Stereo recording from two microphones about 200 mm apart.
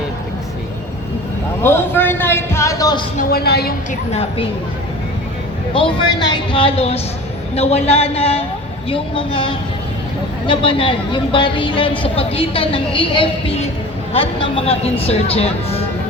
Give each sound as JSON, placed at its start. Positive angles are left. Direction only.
{"t": 1.6, "sound": "a man's voice", "side_deg": 10}
{"t": 3.2, "sound": "speech", "side_deg": 50}
{"t": 4.1, "sound": "speech", "side_deg": 30}
{"t": 5.7, "sound": "a woman's voice", "side_deg": 25}